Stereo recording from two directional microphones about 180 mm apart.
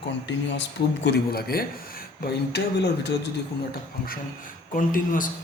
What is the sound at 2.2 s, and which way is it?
Speech, 70° left (ahead or behind).